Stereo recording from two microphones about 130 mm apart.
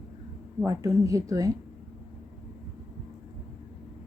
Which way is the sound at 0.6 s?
25° right (ahead or behind).